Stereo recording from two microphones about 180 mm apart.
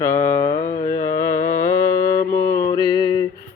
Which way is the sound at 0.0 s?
15° left (ahead or behind).